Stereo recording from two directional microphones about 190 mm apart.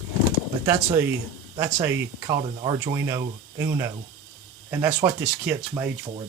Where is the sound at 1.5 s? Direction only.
15° right (ahead or behind).